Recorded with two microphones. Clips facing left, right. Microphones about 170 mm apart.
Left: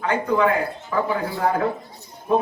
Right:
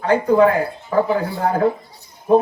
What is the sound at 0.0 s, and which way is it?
A man's voice, 35° right (ahead or behind).